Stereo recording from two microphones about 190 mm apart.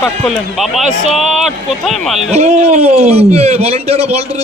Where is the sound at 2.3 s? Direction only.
35° right (ahead or behind).